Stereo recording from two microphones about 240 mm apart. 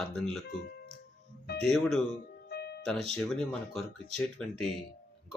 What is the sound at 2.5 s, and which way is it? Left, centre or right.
Music, left.